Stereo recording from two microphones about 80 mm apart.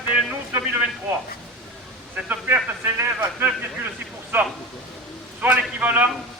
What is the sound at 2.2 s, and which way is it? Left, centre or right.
A man's voice, right.